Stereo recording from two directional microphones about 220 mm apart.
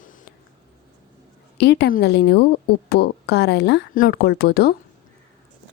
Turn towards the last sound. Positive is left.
turn(degrees=45)  # may be behind; listen again after turning